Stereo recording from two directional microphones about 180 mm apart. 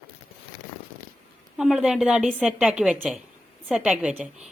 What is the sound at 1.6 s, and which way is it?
A woman's voice, 5° right (ahead or behind).